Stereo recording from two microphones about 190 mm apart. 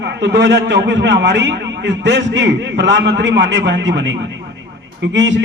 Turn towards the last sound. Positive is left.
turn(degrees=-70)  # may be behind; listen again after turning